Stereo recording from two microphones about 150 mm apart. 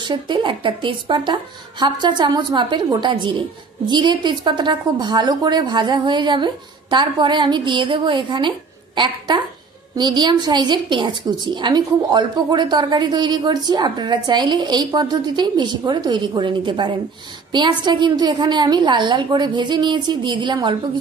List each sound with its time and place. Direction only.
0.0 s a woman's voice: 30° right (ahead or behind)